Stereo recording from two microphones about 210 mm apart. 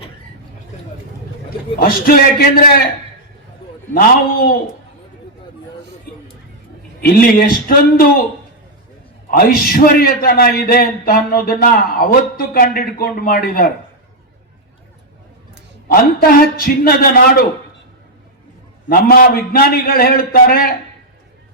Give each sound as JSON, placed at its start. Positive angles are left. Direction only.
{"t": 1.8, "sound": "a man's voice", "side_deg": 45}
{"t": 3.9, "sound": "a man's voice", "side_deg": 45}
{"t": 7.0, "sound": "a man's voice", "side_deg": 40}
{"t": 9.3, "sound": "a man's voice", "side_deg": 45}
{"t": 15.9, "sound": "a man's voice", "side_deg": 45}
{"t": 18.9, "sound": "a man's voice", "side_deg": 45}